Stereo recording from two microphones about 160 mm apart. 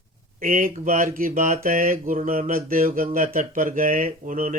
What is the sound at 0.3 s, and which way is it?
Speech, 60° right (ahead or behind).